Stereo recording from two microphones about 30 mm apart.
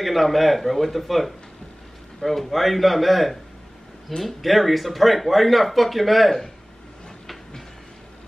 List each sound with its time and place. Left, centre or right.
0.0 s speech: centre